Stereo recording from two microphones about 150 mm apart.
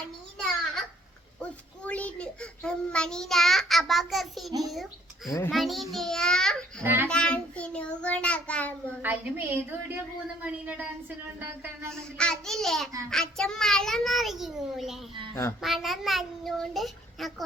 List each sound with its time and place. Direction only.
0.3 s a sound: centre (ahead or behind)
5.5 s a child's voice: centre (ahead or behind)
6.8 s a woman's voice: 15° right (ahead or behind)
7.1 s child singing: 5° left (ahead or behind)
9.0 s a woman's voice: 10° right (ahead or behind)
12.1 s a child's voice: 5° left (ahead or behind)